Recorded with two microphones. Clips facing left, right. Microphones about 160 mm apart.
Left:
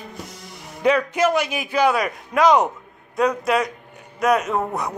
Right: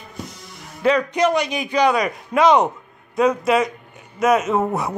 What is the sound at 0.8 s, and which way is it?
Speech, 5° left (ahead or behind).